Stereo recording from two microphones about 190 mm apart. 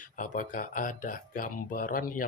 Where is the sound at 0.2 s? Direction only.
45° left (ahead or behind).